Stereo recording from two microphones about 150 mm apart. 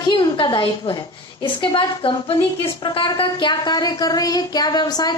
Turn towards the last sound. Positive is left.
turn(degrees=25)  # may be behind; listen again after turning